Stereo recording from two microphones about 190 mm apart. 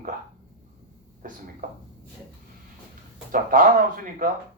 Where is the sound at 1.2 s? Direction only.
45° right (ahead or behind).